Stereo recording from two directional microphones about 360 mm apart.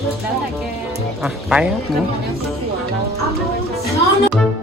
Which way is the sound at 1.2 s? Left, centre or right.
Centre.